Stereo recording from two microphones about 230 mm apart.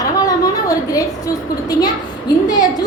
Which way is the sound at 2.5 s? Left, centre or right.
Centre.